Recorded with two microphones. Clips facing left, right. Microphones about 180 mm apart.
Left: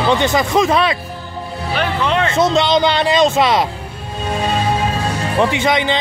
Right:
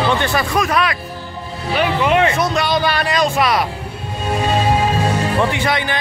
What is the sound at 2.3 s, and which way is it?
A man's voice, 25° left (ahead or behind).